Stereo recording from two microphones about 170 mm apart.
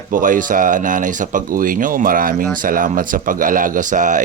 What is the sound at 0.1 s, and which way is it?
Speech, 50° right (ahead or behind).